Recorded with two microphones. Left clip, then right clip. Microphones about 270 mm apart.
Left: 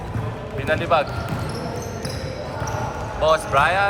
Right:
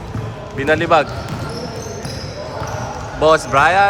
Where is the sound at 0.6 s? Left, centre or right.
Right.